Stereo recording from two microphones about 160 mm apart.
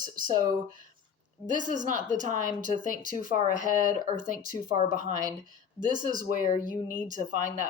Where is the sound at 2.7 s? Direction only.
60° left (ahead or behind).